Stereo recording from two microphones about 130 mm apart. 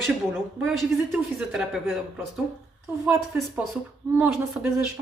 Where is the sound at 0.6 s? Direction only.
Centre (ahead or behind).